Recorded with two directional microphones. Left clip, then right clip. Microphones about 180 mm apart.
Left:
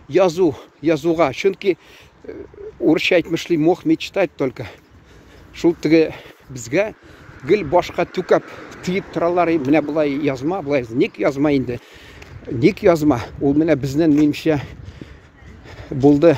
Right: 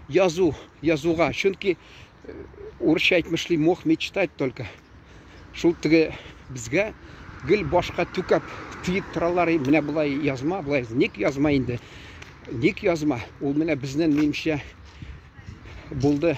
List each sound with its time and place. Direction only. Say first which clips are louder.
0.1 s speech: left 5 dB; 30° left (ahead or behind)
2.8 s speech: left 5 dB; 40° left (ahead or behind)
8.5 s speech: left 1 dB; 20° right (ahead or behind)
8.8 s speech: left 5 dB; 30° left (ahead or behind)
12.8 s speech: left 9 dB; 30° left (ahead or behind)
16.0 s speech: left 10 dB; 35° left (ahead or behind)